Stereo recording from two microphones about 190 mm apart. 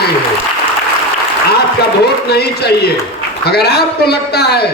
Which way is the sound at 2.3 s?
60° left (ahead or behind).